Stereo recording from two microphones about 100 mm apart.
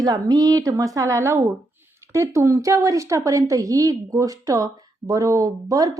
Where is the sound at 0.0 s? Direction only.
40° right (ahead or behind).